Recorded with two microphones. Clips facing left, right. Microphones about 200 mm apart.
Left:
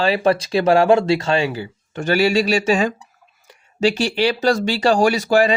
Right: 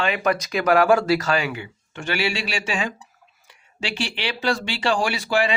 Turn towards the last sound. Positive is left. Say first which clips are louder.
# left 7 dB
turn(degrees=40)  # may be behind; listen again after turning